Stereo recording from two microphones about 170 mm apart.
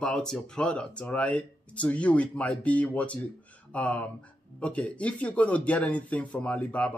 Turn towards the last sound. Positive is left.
turn(degrees=10)  # may be behind; listen again after turning